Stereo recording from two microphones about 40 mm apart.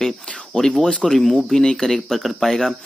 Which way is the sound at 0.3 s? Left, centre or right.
Centre.